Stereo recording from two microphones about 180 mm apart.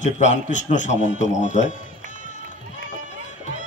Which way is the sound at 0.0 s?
40° left (ahead or behind).